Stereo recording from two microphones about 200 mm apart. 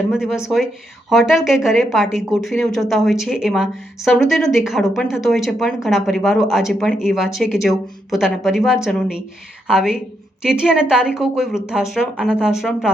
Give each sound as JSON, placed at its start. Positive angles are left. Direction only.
{"t": 1.1, "sound": "a woman's voice", "side_deg": 0}